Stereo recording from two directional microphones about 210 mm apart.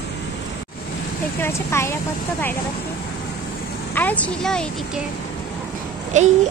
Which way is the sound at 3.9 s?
10° left (ahead or behind).